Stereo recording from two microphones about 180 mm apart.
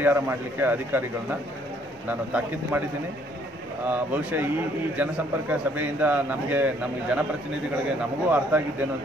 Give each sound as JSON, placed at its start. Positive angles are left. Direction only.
{"t": 0.0, "sound": "a man's voice", "side_deg": -10}
{"t": 2.0, "sound": "a man's voice", "side_deg": -10}
{"t": 3.8, "sound": "a man's voice", "side_deg": -10}